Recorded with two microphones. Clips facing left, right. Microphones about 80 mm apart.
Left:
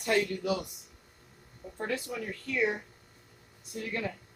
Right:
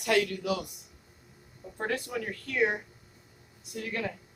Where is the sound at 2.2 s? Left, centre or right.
Right.